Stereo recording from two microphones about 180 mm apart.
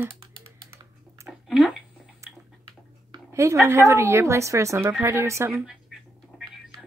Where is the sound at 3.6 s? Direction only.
15° right (ahead or behind).